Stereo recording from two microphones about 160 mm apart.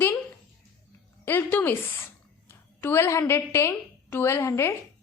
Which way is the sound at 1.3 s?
10° left (ahead or behind).